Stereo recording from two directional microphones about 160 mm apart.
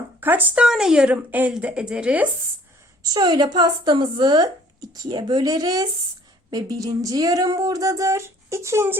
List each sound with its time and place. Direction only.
0.2 s a woman's voice: 10° right (ahead or behind)
3.0 s speech: 25° right (ahead or behind)